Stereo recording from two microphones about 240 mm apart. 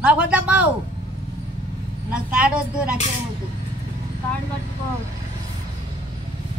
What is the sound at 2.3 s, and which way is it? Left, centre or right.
Speech, centre.